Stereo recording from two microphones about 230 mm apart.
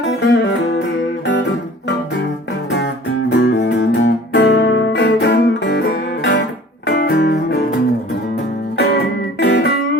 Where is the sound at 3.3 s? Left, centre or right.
Left.